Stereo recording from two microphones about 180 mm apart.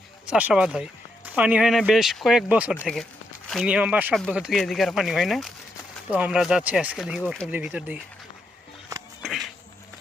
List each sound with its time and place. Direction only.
0.3 s speech: 5° right (ahead or behind)
9.2 s insect: centre (ahead or behind)